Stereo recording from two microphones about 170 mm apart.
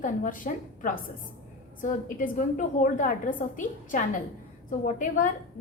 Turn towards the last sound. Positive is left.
turn(degrees=50)  # may be behind; listen again after turning